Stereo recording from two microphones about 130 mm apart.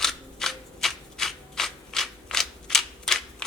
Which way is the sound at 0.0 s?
5° left (ahead or behind).